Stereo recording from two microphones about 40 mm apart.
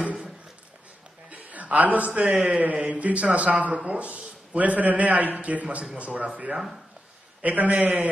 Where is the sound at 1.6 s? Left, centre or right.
Right.